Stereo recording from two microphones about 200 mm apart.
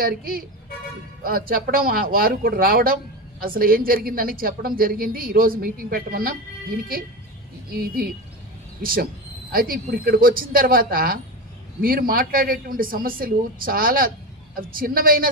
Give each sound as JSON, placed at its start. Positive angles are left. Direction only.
{"t": 0.0, "sound": "a man's voice", "side_deg": -45}